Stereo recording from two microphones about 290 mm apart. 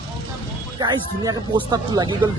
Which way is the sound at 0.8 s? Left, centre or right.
Centre.